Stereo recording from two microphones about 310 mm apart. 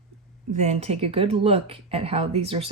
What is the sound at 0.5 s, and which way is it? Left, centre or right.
Speech, right.